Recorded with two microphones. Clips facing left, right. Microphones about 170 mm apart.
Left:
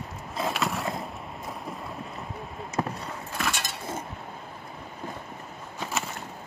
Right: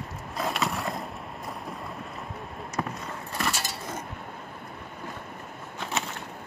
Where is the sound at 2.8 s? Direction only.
25° left (ahead or behind).